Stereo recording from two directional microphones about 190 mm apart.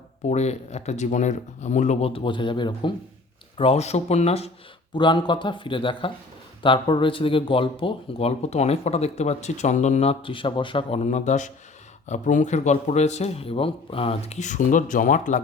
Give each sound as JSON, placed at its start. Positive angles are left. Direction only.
{"t": 0.3, "sound": "speech", "side_deg": 35}